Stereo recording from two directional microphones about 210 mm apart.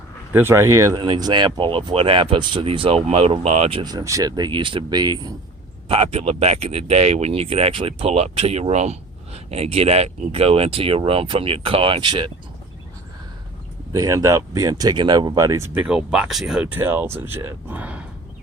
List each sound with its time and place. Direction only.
0.3 s speech: 10° right (ahead or behind)
13.9 s speech: 15° right (ahead or behind)